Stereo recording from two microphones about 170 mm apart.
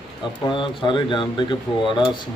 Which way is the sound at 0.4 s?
30° left (ahead or behind).